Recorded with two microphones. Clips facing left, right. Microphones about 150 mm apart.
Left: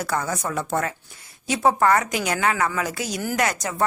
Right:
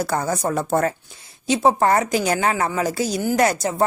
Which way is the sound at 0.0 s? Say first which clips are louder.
Right 4 dB; 35° right (ahead or behind).